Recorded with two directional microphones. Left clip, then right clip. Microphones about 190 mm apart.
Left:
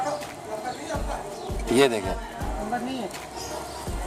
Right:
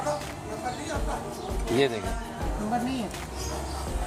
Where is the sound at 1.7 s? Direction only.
30° left (ahead or behind).